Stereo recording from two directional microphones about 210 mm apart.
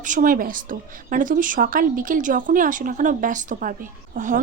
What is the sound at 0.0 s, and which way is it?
A woman's voice, 40° right (ahead or behind).